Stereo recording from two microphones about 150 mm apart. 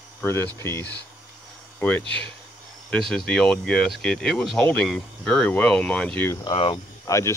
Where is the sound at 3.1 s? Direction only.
5° left (ahead or behind).